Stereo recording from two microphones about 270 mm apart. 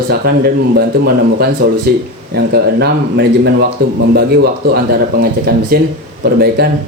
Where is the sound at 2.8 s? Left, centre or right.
Right.